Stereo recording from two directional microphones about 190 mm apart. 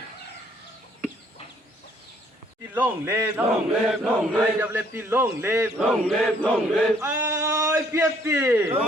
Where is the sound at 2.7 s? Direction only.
15° right (ahead or behind).